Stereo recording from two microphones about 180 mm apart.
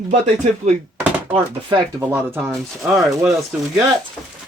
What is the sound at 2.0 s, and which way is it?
Speech, 15° right (ahead or behind).